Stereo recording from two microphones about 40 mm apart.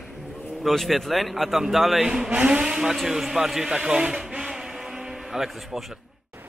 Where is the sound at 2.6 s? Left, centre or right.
Centre.